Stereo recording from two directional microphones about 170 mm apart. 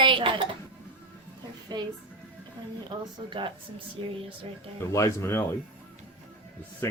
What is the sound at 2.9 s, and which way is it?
Speech, 25° right (ahead or behind).